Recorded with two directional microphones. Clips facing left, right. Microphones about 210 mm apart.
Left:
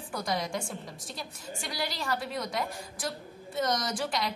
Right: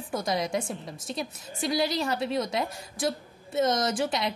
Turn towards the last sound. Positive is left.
turn(degrees=-20)  # may be behind; listen again after turning